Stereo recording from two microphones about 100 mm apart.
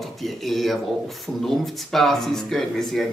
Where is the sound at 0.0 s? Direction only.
Centre (ahead or behind).